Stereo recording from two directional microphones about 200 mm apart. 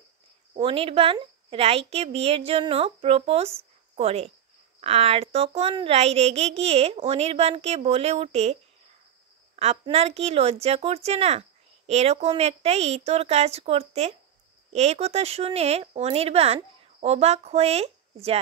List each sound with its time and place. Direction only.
0.6 s a woman's voice: 25° right (ahead or behind)
9.6 s speech: 30° right (ahead or behind)